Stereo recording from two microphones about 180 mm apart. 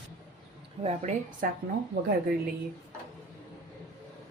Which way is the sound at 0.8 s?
40° right (ahead or behind).